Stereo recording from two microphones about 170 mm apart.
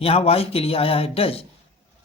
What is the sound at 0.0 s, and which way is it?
Speech, 35° left (ahead or behind).